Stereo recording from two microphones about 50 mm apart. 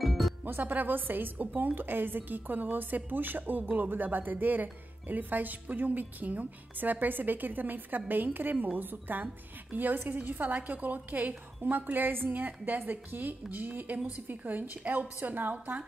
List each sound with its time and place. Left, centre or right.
0.0 s music: centre
0.5 s a woman's voice: right